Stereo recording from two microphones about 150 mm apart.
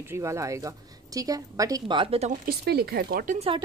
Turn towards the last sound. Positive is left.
turn(degrees=-65)  # may be behind; listen again after turning